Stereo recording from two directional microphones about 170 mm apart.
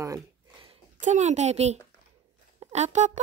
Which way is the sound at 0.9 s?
45° right (ahead or behind).